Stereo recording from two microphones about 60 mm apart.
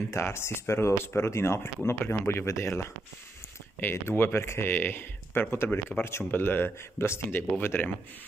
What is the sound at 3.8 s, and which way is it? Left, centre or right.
Speech, left.